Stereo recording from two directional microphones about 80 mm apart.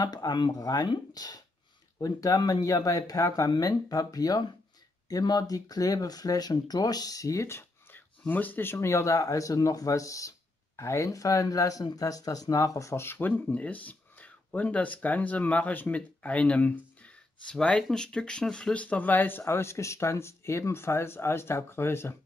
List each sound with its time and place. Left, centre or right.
0.0 s speech: left
0.5 s speech: left
8.3 s speech: left